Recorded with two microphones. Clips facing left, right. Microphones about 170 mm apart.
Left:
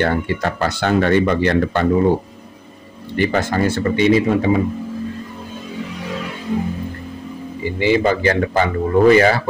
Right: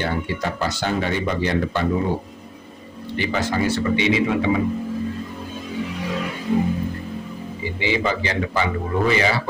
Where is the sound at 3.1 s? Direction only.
50° left (ahead or behind).